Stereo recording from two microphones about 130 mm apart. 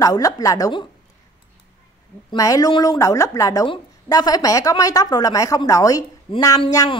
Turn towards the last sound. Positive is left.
turn(degrees=30)  # may be behind; listen again after turning